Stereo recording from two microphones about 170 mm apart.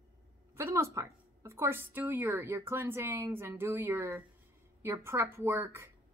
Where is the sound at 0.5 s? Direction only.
15° right (ahead or behind).